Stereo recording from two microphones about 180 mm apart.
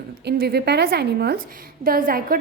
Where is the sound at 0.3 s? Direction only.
65° right (ahead or behind).